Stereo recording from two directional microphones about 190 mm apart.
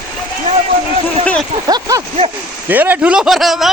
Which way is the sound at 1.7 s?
20° right (ahead or behind).